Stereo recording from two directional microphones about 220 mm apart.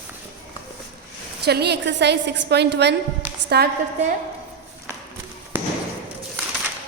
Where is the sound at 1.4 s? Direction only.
50° right (ahead or behind).